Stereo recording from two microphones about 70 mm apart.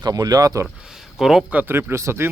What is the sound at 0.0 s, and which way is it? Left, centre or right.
Speech, right.